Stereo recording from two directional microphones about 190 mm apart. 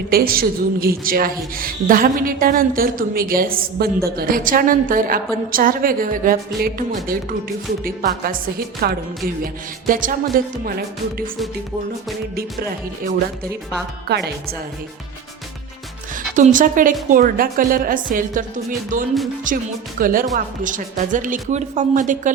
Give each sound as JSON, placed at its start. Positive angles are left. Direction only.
{"t": 0.1, "sound": "a woman's voice", "side_deg": -50}
{"t": 14.1, "sound": "a woman's voice", "side_deg": -60}
{"t": 16.3, "sound": "a woman's voice", "side_deg": -40}